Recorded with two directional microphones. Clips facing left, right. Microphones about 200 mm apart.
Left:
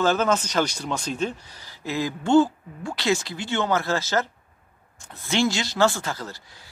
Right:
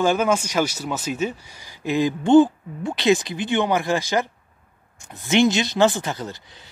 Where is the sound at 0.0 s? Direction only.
10° right (ahead or behind).